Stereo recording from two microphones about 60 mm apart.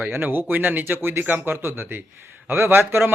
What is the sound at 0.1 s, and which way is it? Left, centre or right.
Speech, right.